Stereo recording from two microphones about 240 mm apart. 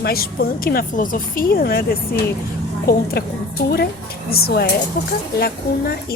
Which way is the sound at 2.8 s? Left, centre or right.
Left.